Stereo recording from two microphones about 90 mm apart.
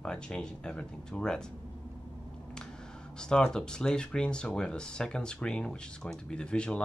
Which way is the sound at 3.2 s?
10° left (ahead or behind).